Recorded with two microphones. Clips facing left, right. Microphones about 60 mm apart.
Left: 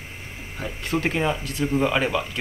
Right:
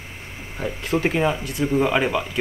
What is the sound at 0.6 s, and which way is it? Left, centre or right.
Speech, centre.